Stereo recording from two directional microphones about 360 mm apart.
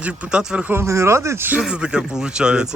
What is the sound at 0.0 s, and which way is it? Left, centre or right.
Speech, centre.